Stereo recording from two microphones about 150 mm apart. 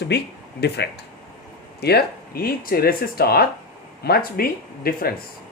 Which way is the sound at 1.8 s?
90° left.